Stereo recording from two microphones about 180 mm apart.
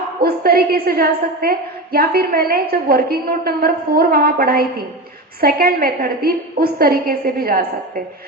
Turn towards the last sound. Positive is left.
turn(degrees=-55)  # may be behind; listen again after turning